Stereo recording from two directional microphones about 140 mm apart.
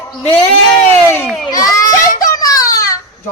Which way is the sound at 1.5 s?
25° left (ahead or behind).